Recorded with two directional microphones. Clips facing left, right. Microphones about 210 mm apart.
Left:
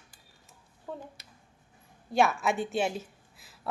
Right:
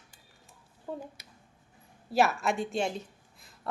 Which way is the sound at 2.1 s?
Centre (ahead or behind).